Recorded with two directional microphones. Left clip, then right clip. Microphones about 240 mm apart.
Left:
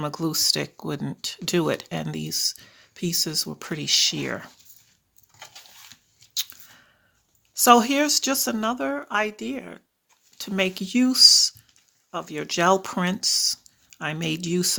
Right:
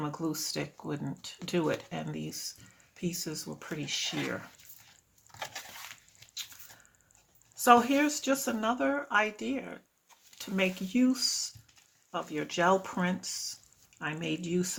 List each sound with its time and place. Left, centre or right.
0.0 s speech: left
7.5 s speech: left